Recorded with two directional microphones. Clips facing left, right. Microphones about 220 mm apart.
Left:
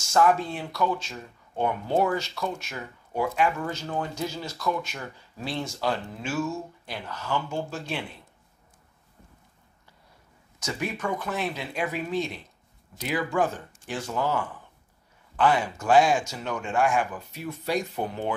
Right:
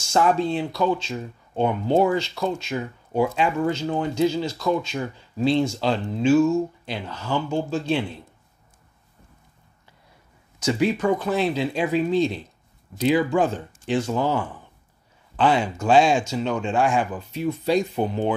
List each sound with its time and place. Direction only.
0.1 s speech: 25° right (ahead or behind)
11.0 s speech: 30° right (ahead or behind)